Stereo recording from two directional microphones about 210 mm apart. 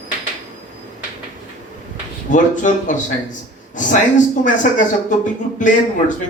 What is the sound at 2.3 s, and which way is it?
Speech, 35° left (ahead or behind).